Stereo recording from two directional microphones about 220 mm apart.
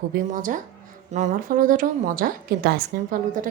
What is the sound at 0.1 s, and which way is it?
A woman's voice, 35° right (ahead or behind).